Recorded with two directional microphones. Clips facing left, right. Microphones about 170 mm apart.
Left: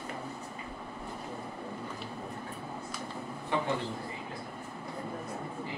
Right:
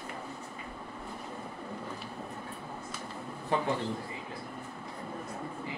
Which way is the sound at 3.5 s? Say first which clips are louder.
Right 1 dB; 35° right (ahead or behind).